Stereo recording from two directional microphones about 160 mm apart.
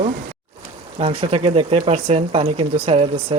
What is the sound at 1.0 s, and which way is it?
Speech, 35° right (ahead or behind).